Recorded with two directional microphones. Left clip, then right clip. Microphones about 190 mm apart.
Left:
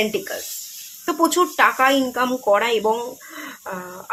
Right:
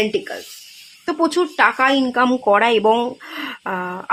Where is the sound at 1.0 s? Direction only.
5° right (ahead or behind).